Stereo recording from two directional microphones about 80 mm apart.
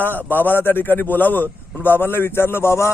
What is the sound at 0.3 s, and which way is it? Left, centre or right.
A man's voice, left.